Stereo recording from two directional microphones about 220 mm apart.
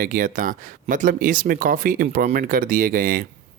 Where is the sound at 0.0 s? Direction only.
40° right (ahead or behind).